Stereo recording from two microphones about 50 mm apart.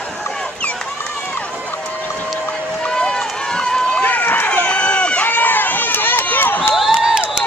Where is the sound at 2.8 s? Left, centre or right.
Centre.